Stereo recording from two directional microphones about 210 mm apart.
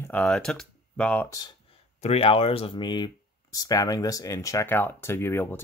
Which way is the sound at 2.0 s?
30° left (ahead or behind).